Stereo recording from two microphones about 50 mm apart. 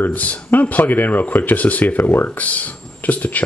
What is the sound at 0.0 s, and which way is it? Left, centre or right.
Speech, left.